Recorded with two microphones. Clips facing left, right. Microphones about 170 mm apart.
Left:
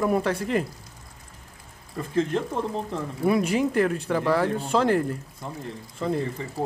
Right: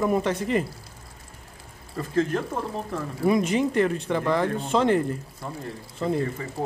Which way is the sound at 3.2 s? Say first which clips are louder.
Even; 5° left (ahead or behind).